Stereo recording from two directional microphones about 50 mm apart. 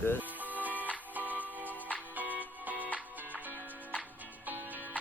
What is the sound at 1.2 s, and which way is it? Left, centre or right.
Music, left.